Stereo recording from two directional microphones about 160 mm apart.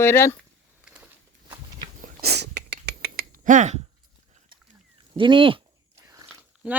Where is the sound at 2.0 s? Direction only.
80° right; by 3.8 s 50° right (ahead or behind).